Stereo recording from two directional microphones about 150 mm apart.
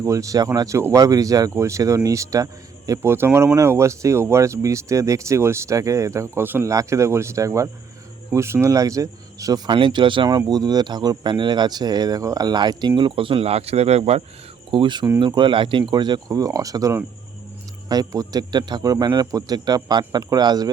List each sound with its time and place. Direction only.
0.0 s speech: 20° right (ahead or behind)